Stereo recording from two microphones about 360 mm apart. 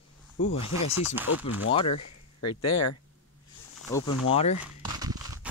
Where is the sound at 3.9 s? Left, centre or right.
Centre.